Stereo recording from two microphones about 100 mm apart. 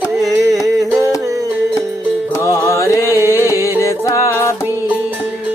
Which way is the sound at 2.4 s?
30° left (ahead or behind).